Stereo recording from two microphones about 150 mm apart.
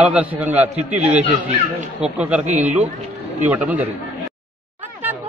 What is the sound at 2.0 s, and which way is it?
A man's voice, 10° right (ahead or behind).